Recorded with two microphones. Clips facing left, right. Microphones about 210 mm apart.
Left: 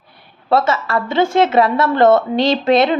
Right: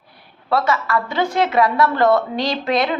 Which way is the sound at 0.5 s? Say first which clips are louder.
Left 3 dB; 25° left (ahead or behind).